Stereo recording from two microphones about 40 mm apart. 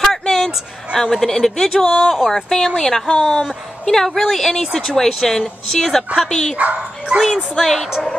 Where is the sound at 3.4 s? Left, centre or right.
Centre.